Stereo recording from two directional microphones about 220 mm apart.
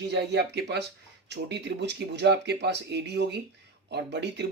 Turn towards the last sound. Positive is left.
turn(degrees=-50)  # may be behind; listen again after turning